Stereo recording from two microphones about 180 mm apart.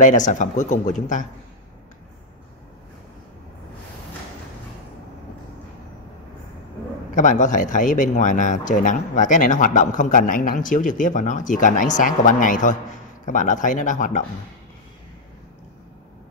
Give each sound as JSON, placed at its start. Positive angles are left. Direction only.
{"t": 0.0, "sound": "speech", "side_deg": 45}
{"t": 7.2, "sound": "speech", "side_deg": 45}